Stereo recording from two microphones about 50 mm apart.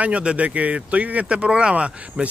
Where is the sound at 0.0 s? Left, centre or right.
Right.